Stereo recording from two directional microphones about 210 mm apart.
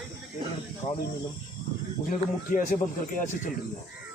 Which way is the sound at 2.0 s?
40° left (ahead or behind).